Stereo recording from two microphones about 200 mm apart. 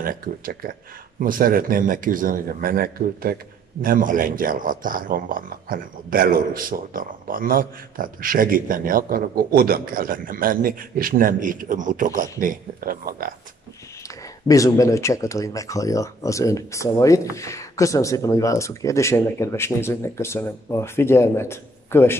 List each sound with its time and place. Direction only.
0.0 s a man's voice: 45° right (ahead or behind)
14.0 s speech: 15° left (ahead or behind)